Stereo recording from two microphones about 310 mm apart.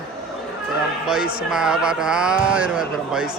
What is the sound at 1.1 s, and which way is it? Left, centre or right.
Speech, centre.